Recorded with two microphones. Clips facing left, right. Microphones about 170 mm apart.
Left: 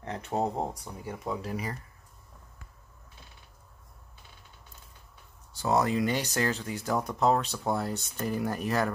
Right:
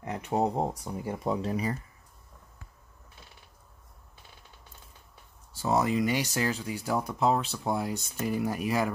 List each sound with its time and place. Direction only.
0.0 s speech: 15° right (ahead or behind)
1.2 s speech: 25° right (ahead or behind)
5.5 s speech: 5° right (ahead or behind)